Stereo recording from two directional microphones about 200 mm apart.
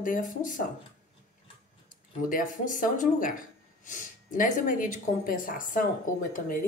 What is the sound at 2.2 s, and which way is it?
Speech, 40° left (ahead or behind).